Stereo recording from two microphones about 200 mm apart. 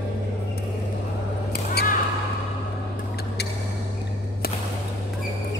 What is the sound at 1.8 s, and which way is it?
Basketball bounce, 55° left (ahead or behind).